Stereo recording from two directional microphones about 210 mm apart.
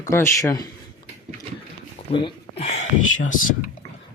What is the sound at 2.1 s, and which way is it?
Speech, 25° left (ahead or behind).